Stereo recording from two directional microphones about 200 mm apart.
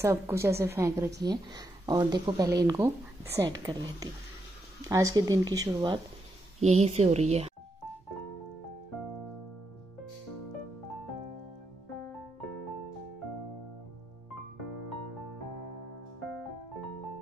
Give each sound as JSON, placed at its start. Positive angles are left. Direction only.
{"t": 0.0, "sound": "a woman's voice", "side_deg": -15}
{"t": 6.6, "sound": "a woman's voice", "side_deg": -35}